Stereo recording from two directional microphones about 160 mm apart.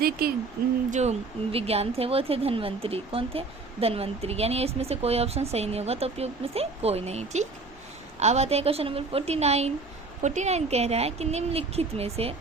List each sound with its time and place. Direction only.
0.0 s speech: 70° right (ahead or behind)
0.9 s a sound: 45° right (ahead or behind)
1.5 s speech: 40° right (ahead or behind)